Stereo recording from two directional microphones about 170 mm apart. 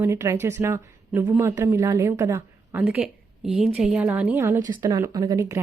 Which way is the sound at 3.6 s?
5° right (ahead or behind).